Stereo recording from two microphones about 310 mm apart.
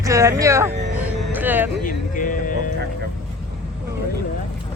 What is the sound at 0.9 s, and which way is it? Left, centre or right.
Music, centre.